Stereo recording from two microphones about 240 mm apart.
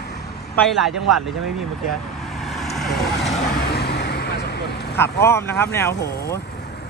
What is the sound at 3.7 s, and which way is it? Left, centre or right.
Vehicle, left.